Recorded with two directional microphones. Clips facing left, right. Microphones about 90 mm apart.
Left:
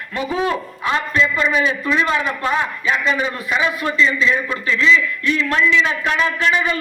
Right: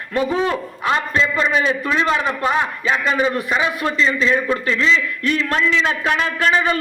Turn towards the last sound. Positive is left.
turn(degrees=-40)  # may be behind; listen again after turning